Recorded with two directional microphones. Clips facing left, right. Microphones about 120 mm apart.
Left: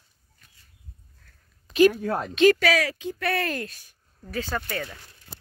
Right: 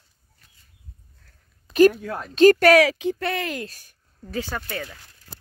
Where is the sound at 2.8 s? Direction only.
80° right.